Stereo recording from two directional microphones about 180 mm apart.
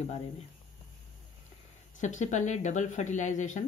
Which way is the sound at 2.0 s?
40° left (ahead or behind).